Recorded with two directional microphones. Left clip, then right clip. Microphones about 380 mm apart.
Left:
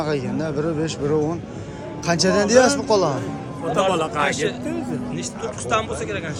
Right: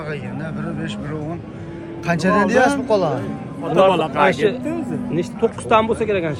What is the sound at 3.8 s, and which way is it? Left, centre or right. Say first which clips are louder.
A man's voice: right 6 dB; centre.